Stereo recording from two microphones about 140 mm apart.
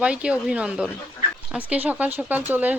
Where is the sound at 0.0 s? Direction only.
10° right (ahead or behind).